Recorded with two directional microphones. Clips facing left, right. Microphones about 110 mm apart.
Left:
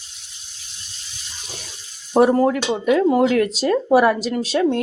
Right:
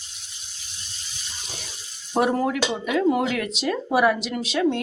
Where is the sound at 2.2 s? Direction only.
35° left (ahead or behind).